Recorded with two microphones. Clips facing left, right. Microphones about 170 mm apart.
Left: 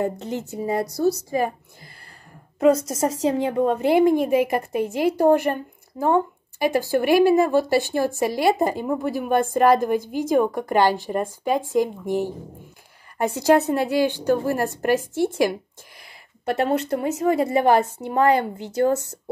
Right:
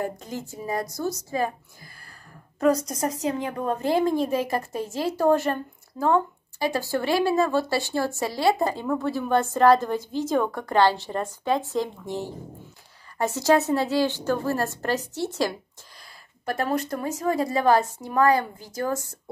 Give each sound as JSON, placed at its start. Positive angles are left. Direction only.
{"t": 0.0, "sound": "a woman's voice", "side_deg": 20}
{"t": 0.8, "sound": "a woman's voice", "side_deg": 65}
{"t": 1.3, "sound": "a woman's voice", "side_deg": 15}
{"t": 2.9, "sound": "a woman's voice", "side_deg": 25}
{"t": 15.0, "sound": "a woman's voice", "side_deg": 50}
{"t": 15.3, "sound": "a sound", "side_deg": 20}
{"t": 16.9, "sound": "a woman's voice", "side_deg": 20}
{"t": 18.4, "sound": "a woman's voice", "side_deg": 70}